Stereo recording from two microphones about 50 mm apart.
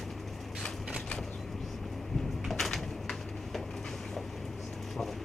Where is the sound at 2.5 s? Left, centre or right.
Centre.